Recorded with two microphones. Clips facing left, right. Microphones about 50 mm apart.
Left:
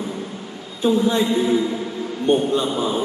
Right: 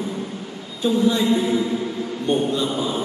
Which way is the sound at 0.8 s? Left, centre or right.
Left.